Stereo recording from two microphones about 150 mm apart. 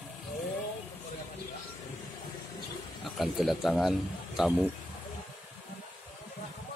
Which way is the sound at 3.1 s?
Centre (ahead or behind).